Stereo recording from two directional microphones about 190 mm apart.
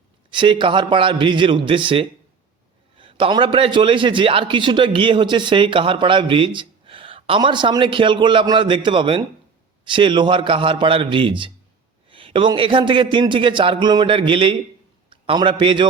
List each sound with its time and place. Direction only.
0.3 s a man's voice: 25° right (ahead or behind)